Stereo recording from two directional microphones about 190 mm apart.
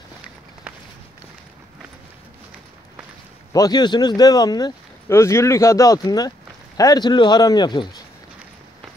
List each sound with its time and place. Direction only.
3.5 s speech: 20° left (ahead or behind)